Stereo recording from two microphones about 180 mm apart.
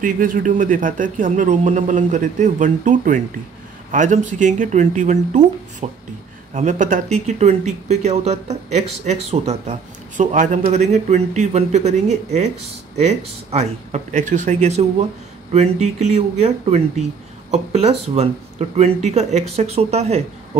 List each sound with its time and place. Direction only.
0.0 s speech: 50° right (ahead or behind)